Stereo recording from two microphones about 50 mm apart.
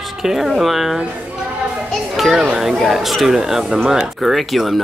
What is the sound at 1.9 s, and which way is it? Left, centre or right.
Children playing, centre.